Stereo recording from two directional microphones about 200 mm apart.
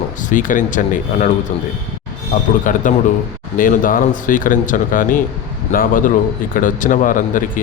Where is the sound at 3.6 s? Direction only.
45° left (ahead or behind).